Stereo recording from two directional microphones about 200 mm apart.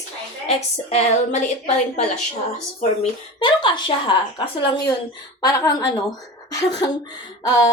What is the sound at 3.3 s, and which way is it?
A woman's voice, 25° left (ahead or behind).